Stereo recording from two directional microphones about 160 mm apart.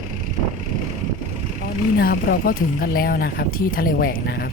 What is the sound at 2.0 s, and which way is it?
Speech, 70° left (ahead or behind).